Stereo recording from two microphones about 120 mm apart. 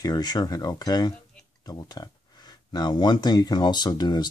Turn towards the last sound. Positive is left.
turn(degrees=35)  # may be behind; listen again after turning